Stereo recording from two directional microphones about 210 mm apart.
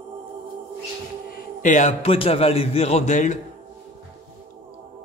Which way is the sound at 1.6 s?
35° left (ahead or behind).